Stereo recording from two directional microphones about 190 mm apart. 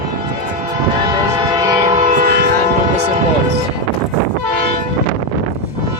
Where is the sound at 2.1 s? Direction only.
50° right (ahead or behind).